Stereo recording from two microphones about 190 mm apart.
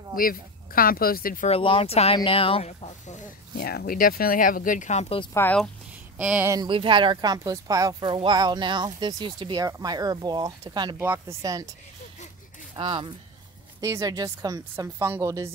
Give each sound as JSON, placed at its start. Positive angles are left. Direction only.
{"t": 0.1, "sound": "speech", "side_deg": 50}
{"t": 1.5, "sound": "speech", "side_deg": 30}
{"t": 3.5, "sound": "speech", "side_deg": 55}
{"t": 5.3, "sound": "speech", "side_deg": 10}
{"t": 6.1, "sound": "a woman's voice", "side_deg": -10}
{"t": 12.7, "sound": "a woman's voice", "side_deg": -25}